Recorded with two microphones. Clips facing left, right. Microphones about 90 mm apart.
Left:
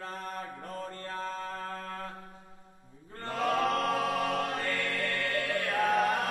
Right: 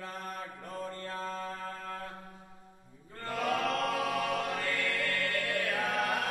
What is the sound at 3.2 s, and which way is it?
Chant, 35° left (ahead or behind).